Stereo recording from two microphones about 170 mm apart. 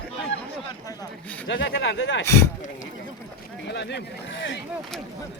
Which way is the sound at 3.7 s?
85° left.